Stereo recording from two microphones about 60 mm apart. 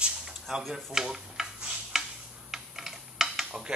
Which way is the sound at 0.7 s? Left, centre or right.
Centre.